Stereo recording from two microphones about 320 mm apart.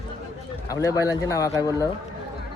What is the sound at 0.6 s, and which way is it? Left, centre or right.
Speech, centre.